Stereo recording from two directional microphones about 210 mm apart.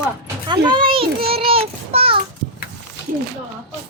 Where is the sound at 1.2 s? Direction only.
25° right (ahead or behind).